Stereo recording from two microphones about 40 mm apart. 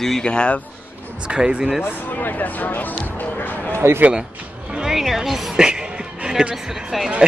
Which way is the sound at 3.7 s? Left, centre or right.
Right.